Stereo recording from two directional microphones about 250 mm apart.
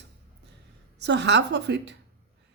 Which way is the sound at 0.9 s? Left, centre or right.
Right.